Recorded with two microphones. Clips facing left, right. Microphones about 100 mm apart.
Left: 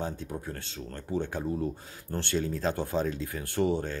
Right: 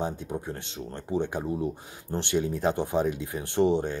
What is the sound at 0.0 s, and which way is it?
Speech, 20° right (ahead or behind).